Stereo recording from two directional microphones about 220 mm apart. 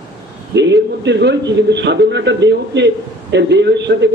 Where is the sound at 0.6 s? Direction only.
50° right (ahead or behind).